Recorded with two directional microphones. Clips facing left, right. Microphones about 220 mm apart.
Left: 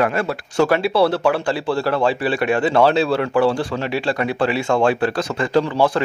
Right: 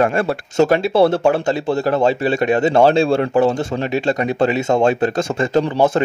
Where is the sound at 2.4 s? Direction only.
25° right (ahead or behind).